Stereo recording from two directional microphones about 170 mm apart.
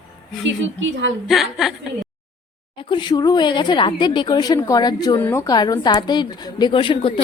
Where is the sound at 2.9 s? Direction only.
25° left (ahead or behind).